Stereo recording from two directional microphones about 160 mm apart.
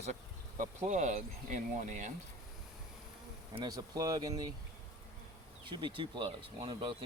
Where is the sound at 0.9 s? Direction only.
50° right (ahead or behind).